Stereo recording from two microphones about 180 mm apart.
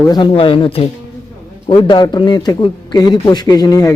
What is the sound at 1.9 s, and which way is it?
A man's voice, 25° left (ahead or behind).